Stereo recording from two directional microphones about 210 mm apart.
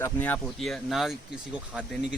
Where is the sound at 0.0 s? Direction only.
5° left (ahead or behind).